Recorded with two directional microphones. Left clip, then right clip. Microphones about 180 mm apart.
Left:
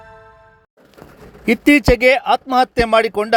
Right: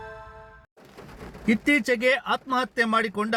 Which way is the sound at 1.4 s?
50° left (ahead or behind).